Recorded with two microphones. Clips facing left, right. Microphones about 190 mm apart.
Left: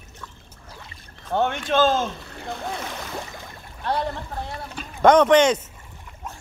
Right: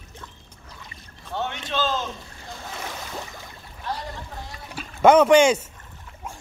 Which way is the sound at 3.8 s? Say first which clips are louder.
Left 7 dB; 65° left (ahead or behind).